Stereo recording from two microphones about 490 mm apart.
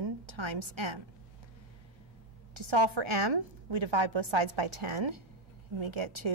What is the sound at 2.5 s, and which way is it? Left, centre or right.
A woman's voice, right.